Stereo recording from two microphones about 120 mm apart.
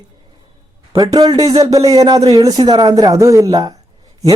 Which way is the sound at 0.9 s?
35° right (ahead or behind).